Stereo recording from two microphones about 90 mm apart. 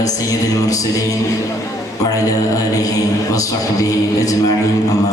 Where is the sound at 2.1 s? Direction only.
40° left (ahead or behind).